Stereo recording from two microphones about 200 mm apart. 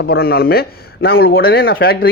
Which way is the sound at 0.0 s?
50° left (ahead or behind).